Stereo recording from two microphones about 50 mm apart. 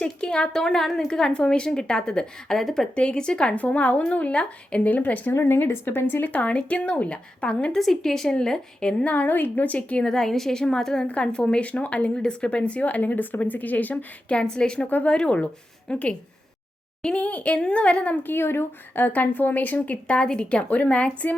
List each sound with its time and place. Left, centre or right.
0.0 s speech: centre
2.9 s speech: left
4.9 s speech: left
5.3 s speech: left
5.5 s speech: left
6.2 s speech: left
7.8 s speech: centre
9.0 s speech: left
9.7 s speech: centre
11.0 s speech: left
14.8 s speech: left
15.1 s speech: left
18.2 s speech: left
20.1 s speech: centre